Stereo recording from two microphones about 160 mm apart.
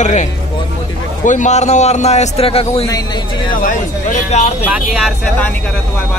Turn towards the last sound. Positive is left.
turn(degrees=-10)  # may be behind; listen again after turning